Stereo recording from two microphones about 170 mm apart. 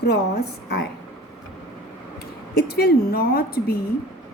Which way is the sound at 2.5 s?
65° left (ahead or behind).